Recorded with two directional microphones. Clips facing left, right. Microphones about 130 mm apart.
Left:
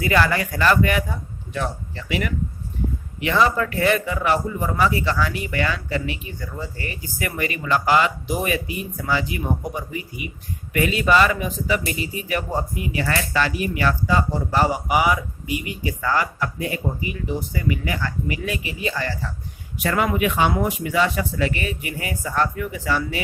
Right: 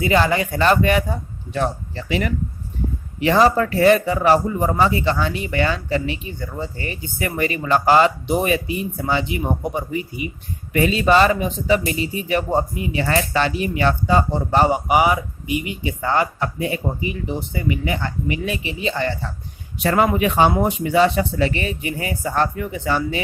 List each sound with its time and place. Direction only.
0.0 s a man's voice: 20° right (ahead or behind)